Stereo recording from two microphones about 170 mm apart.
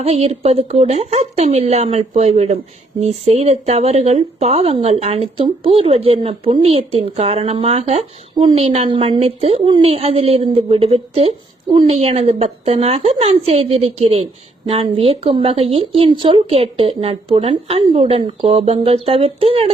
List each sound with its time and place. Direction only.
0.0 s speech: 35° right (ahead or behind)